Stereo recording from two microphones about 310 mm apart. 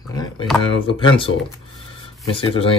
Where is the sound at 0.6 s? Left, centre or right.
Centre.